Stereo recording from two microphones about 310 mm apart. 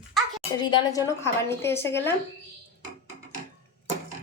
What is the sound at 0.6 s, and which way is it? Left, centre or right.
A woman's voice, centre.